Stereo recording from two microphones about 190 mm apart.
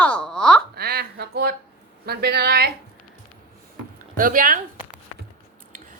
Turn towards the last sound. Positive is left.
turn(degrees=-45)  # may be behind; listen again after turning